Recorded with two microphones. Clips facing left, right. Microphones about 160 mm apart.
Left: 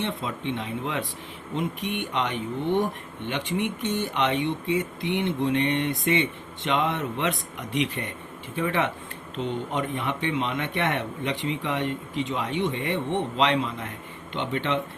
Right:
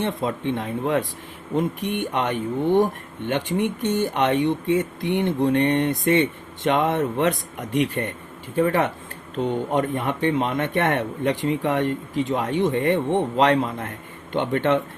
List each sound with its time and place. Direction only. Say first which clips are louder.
0.0 s speech: right 5 dB; 45° right (ahead or behind)